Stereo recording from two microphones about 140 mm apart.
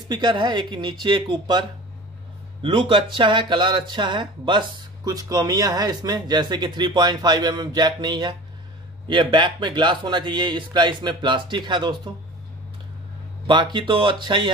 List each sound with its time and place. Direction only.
0.1 s speech: 35° right (ahead or behind)
13.5 s speech: 30° right (ahead or behind)